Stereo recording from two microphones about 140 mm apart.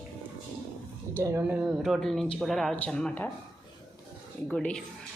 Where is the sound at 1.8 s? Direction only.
Centre (ahead or behind).